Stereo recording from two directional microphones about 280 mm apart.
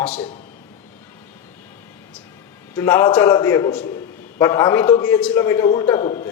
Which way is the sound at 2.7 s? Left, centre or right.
Centre.